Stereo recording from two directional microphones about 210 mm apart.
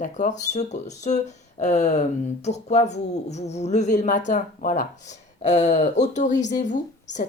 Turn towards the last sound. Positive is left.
turn(degrees=35)  # may be behind; listen again after turning